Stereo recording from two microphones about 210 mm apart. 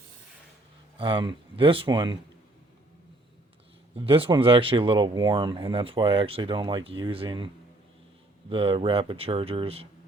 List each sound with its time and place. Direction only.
0.9 s speech: 25° right (ahead or behind)
3.9 s speech: 25° right (ahead or behind)
8.4 s speech: 25° right (ahead or behind)